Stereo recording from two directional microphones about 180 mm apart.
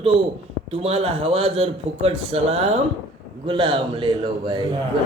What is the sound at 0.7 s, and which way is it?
A man's voice, 35° right (ahead or behind).